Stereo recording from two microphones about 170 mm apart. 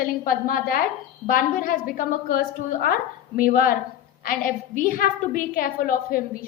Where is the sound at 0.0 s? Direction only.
55° left (ahead or behind).